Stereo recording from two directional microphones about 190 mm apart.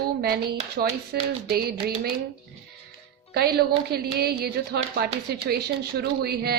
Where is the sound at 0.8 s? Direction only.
55° right (ahead or behind).